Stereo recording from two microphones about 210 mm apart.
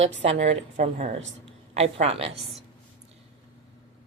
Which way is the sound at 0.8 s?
40° right (ahead or behind).